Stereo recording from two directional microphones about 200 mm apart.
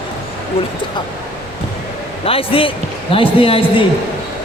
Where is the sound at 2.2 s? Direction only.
30° left (ahead or behind).